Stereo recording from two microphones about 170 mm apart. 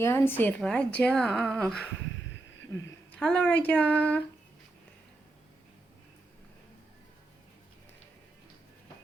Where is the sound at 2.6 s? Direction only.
90° left.